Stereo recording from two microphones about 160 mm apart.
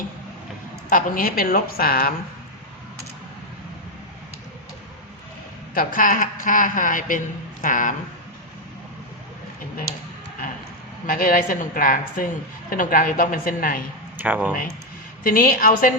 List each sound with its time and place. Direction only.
0.9 s a woman's voice: 60° left (ahead or behind)
5.7 s a woman's voice: 60° left (ahead or behind)
11.0 s a woman's voice: 65° left (ahead or behind)
14.2 s speech: 10° right (ahead or behind)
15.2 s a woman's voice: 65° left (ahead or behind)